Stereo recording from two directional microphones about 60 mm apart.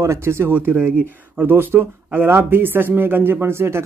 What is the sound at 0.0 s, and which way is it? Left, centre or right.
Speech, right.